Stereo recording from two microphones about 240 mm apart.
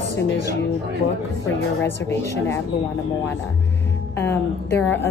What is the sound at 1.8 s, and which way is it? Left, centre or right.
Speech, centre.